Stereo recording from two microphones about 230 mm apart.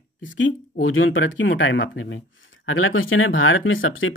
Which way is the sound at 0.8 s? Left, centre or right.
Left.